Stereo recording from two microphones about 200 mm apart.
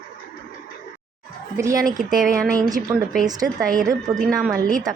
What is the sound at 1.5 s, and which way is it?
Speech, 15° right (ahead or behind).